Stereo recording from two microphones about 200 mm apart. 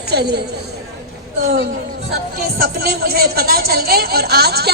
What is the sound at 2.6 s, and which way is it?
Speech, 50° right (ahead or behind).